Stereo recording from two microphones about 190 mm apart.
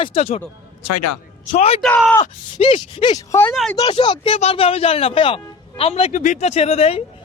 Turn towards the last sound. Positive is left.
turn(degrees=35)  # may be behind; listen again after turning